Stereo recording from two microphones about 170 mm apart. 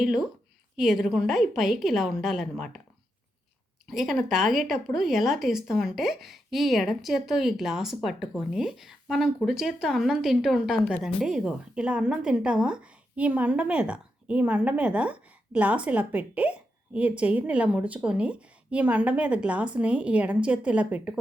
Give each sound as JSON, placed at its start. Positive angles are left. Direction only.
{"t": 0.0, "sound": "speech", "side_deg": 0}
{"t": 3.8, "sound": "speech", "side_deg": 0}